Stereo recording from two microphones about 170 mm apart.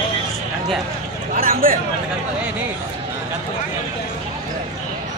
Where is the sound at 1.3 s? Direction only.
55° right (ahead or behind).